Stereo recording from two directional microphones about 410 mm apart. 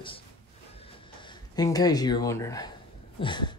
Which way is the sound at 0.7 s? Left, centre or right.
Centre.